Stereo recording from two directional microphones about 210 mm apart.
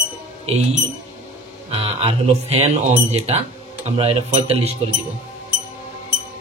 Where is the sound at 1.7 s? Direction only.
25° right (ahead or behind).